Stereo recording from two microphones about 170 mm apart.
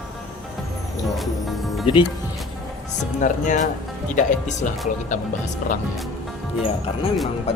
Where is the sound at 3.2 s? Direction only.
50° left (ahead or behind).